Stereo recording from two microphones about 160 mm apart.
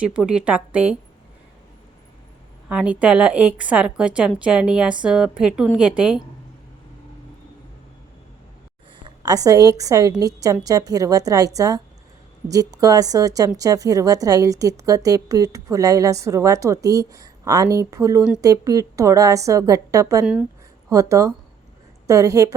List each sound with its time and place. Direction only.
0.0 s a woman's voice: 5° right (ahead or behind)
2.6 s a woman's voice: 10° right (ahead or behind)
9.0 s a woman's voice: 25° right (ahead or behind)